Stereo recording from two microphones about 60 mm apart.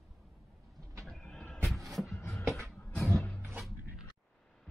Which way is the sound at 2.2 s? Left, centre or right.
Left.